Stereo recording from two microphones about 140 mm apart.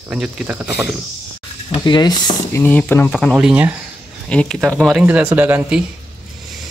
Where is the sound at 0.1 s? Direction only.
10° right (ahead or behind).